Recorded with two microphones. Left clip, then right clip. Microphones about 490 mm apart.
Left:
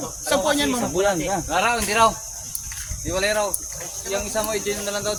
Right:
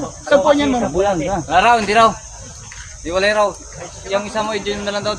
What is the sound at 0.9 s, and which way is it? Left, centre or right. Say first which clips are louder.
Speech: right 2 dB; left.